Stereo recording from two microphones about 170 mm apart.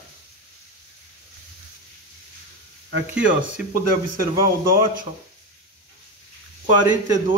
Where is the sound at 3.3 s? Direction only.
55° right (ahead or behind).